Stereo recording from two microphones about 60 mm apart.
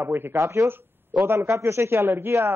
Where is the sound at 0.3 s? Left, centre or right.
Right.